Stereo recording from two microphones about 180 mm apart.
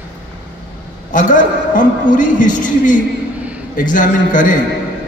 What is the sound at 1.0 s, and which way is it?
A man's voice, 45° left (ahead or behind).